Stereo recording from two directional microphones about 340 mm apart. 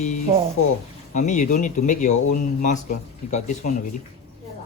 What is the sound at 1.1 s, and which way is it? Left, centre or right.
Speech, left.